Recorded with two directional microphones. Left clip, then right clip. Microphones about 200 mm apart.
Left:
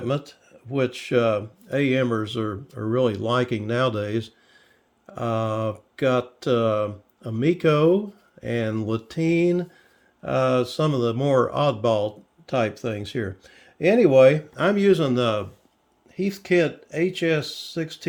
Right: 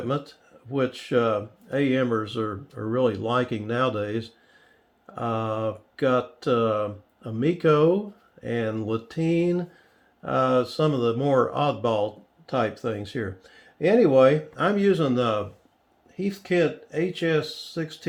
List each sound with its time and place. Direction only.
0.1 s speech: 50° left (ahead or behind)